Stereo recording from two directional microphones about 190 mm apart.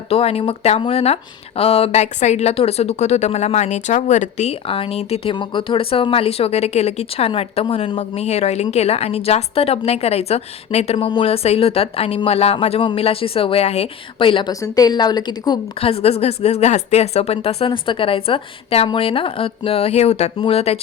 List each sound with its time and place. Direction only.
0.1 s speech: 30° left (ahead or behind)